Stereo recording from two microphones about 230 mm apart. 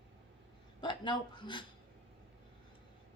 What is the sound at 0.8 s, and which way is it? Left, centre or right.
Speech, left.